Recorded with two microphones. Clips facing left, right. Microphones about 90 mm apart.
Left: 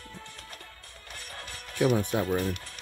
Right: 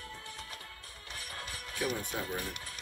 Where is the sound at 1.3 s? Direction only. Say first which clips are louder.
Left 9 dB; 55° left (ahead or behind).